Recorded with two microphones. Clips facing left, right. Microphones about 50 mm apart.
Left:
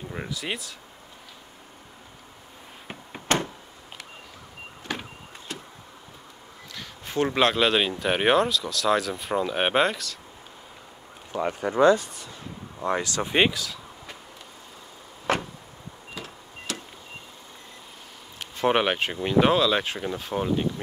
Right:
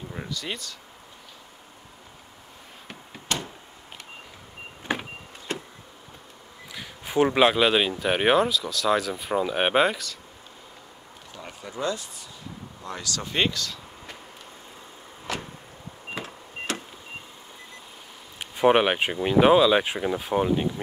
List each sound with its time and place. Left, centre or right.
0.1 s speech: centre
3.3 s a sound: left
4.9 s vehicle: right
6.7 s speech: centre
11.3 s speech: left
12.8 s speech: left
13.5 s speech: centre
15.3 s vehicle: left
16.2 s power windows: right
18.4 s speech: centre